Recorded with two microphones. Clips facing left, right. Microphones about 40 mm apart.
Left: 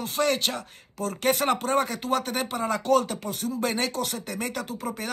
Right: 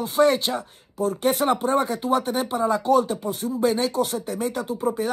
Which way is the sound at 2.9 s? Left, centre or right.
Left.